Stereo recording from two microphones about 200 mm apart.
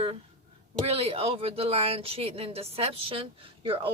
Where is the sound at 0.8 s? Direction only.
30° right (ahead or behind).